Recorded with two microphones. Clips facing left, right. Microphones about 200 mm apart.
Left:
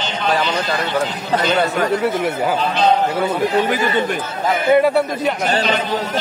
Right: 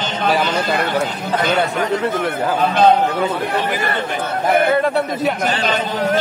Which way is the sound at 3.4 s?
60° right (ahead or behind).